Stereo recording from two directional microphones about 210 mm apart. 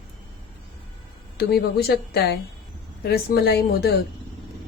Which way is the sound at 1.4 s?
50° left (ahead or behind).